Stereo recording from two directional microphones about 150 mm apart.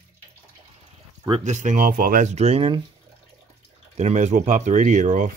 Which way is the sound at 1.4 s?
55° right (ahead or behind).